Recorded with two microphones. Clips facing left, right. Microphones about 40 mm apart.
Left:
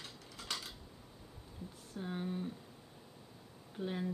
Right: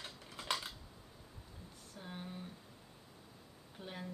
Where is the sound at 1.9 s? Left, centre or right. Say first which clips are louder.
Left 8 dB; centre.